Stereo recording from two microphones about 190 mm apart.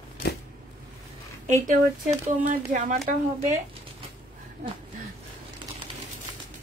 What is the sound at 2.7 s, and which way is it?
Speech, 45° right (ahead or behind).